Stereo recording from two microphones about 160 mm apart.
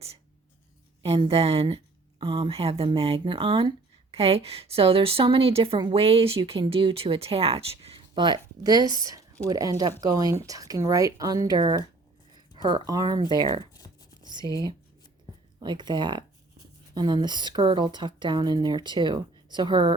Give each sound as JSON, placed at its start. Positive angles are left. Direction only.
{"t": 1.0, "sound": "speech", "side_deg": -35}
{"t": 14.2, "sound": "whispering", "side_deg": -25}
{"t": 15.6, "sound": "speech", "side_deg": -30}